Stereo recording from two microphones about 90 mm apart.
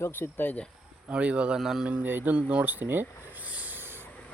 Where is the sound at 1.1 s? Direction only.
15° right (ahead or behind).